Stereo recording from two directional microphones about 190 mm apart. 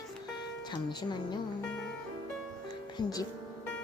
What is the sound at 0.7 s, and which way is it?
Speech, 25° left (ahead or behind).